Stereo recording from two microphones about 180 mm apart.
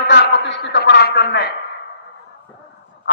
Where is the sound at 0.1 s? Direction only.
80° left.